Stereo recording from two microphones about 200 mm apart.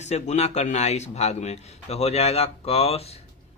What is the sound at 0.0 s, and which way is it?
Speech, 35° left (ahead or behind).